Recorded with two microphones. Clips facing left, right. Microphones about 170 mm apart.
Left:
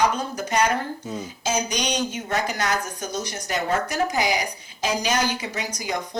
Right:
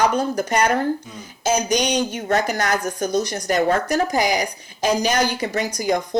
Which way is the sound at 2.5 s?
45° right (ahead or behind).